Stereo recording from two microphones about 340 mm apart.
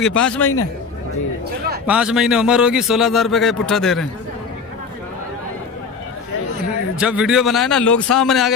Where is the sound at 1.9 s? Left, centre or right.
Centre.